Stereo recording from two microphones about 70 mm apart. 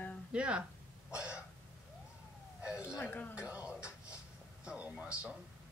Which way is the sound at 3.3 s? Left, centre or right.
Centre.